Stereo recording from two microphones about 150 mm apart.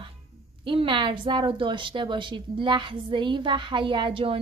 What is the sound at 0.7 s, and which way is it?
A woman's voice, 35° right (ahead or behind).